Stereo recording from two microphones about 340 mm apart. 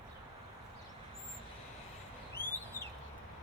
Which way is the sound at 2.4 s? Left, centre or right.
Left.